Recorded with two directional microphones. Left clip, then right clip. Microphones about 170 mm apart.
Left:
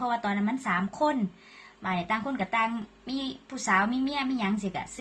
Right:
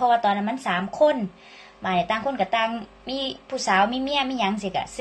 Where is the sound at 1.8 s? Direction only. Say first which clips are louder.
Right 6 dB; 20° left (ahead or behind).